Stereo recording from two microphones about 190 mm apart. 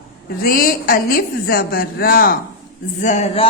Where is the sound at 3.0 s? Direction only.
40° left (ahead or behind).